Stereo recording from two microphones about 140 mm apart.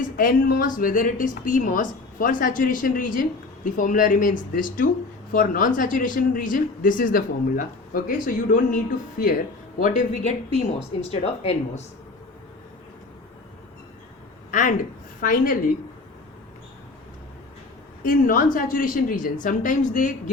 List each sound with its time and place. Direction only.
0.0 s speech: 90° left; by 11.8 s 50° left (ahead or behind)
14.5 s speech: 65° left (ahead or behind)
15.2 s a woman's voice: 90° left
18.0 s speech: 80° left